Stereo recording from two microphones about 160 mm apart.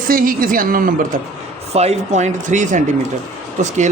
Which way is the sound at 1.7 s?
40° right (ahead or behind).